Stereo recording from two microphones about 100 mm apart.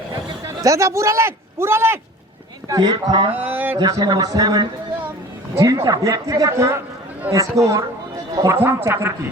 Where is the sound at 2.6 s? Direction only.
45° right (ahead or behind).